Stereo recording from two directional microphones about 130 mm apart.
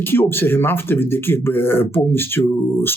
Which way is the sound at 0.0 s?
15° left (ahead or behind).